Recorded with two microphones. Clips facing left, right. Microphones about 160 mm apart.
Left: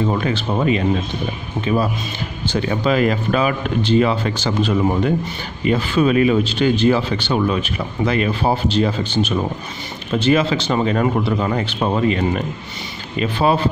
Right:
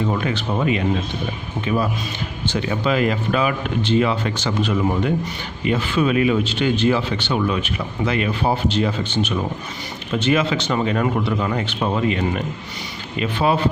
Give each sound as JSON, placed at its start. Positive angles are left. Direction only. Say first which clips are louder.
{"t": 0.1, "sound": "speech", "louder": "left 2 dB", "side_deg": 30}
{"t": 2.5, "sound": "speech", "louder": "left 3 dB", "side_deg": 35}